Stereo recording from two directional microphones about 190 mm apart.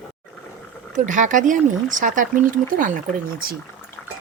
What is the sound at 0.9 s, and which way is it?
Speech, 40° right (ahead or behind).